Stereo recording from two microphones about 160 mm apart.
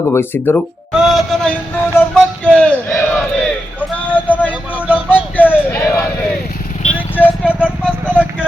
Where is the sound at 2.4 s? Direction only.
5° left (ahead or behind).